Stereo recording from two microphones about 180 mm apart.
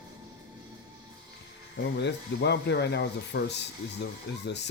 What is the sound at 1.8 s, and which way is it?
Speech, 70° left (ahead or behind).